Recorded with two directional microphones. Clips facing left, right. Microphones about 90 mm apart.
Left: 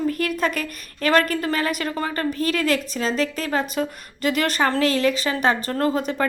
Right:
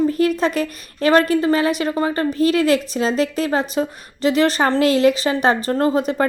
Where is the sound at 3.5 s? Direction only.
30° right (ahead or behind).